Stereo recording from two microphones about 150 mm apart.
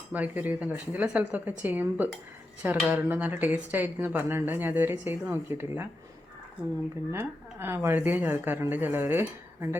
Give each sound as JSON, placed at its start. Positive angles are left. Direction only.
{"t": 0.1, "sound": "speech", "side_deg": -10}
{"t": 7.1, "sound": "speech", "side_deg": -15}